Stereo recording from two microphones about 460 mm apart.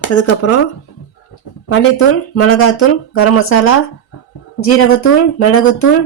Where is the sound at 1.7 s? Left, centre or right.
Left.